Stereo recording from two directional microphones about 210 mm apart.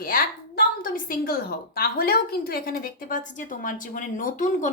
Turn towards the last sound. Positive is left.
turn(degrees=40)  # may be behind; listen again after turning